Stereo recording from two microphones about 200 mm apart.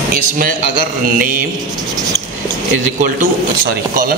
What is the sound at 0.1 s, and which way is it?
Speech, 45° right (ahead or behind).